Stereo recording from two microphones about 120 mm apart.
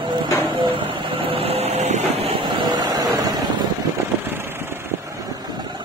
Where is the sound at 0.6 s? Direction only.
45° right (ahead or behind); by 2.2 s 70° right (ahead or behind).